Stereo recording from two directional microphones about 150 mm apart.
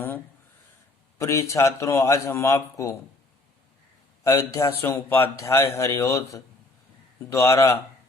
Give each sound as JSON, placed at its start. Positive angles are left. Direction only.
{"t": 1.2, "sound": "a man's voice", "side_deg": 20}
{"t": 4.2, "sound": "a man's voice", "side_deg": 20}